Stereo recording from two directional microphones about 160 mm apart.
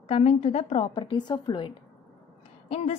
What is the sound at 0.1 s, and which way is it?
Speech, 40° left (ahead or behind).